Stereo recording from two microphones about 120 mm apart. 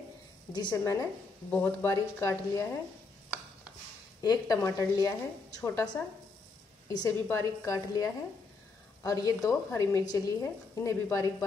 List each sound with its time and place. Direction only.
0.5 s a woman's voice: 30° left (ahead or behind)
1.5 s a woman's voice: 15° left (ahead or behind)
4.2 s a woman's voice: 30° left (ahead or behind)
6.9 s a woman's voice: 35° left (ahead or behind)